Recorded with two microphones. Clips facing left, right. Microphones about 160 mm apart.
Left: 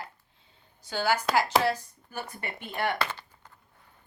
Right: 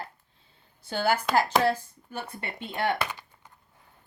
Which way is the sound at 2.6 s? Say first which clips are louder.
Right 2 dB; 20° right (ahead or behind).